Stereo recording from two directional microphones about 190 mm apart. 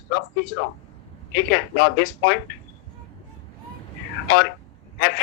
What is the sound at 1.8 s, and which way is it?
Speech, 70° left (ahead or behind).